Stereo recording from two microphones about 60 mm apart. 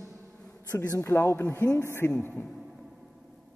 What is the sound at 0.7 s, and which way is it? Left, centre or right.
Speech, left.